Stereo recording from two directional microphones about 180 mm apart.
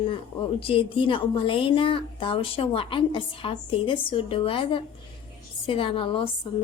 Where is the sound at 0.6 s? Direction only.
30° left (ahead or behind).